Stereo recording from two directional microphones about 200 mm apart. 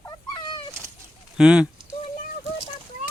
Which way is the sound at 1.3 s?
5° right (ahead or behind).